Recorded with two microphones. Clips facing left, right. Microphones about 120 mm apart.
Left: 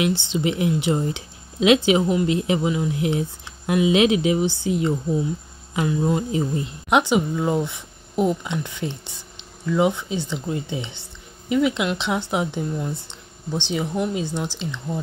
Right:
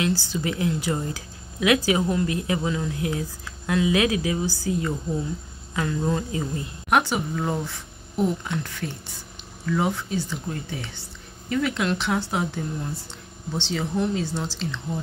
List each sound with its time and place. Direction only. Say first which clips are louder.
0.0 s speech: left 3 dB; 20° left (ahead or behind)